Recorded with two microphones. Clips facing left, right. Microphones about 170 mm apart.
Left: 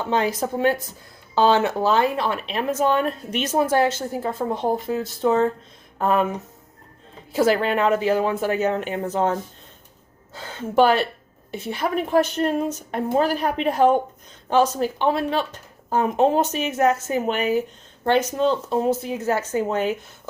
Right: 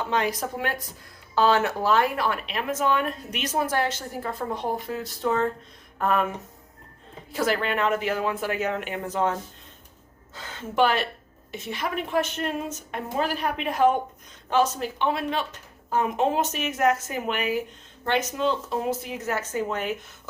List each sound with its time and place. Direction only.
0.0 s speech: 25° left (ahead or behind)
7.3 s a woman's voice: 30° left (ahead or behind)
10.3 s a woman's voice: 35° left (ahead or behind)